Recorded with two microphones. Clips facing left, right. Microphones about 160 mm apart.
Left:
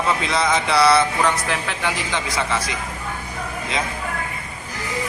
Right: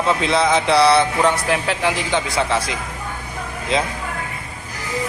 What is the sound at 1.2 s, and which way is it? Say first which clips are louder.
A man's voice: right 3 dB; 30° right (ahead or behind).